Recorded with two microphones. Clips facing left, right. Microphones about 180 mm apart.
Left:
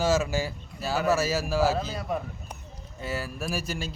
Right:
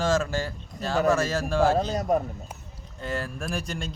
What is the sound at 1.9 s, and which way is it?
Speech, 45° right (ahead or behind).